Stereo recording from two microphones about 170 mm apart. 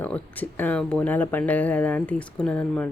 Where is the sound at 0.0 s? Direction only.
10° left (ahead or behind).